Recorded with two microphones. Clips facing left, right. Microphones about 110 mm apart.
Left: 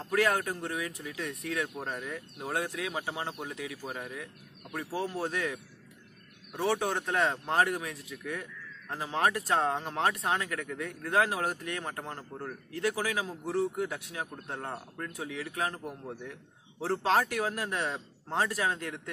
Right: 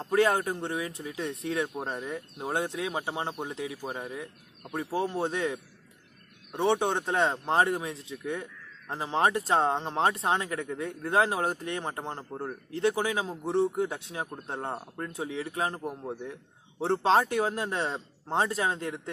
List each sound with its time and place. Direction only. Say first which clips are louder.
0.0 s a man's voice: right 3 dB; 25° right (ahead or behind)